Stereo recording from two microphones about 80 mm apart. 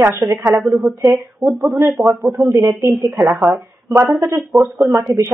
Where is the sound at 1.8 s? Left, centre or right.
Right.